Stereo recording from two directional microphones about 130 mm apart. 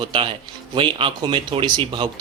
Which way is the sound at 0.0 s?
35° right (ahead or behind).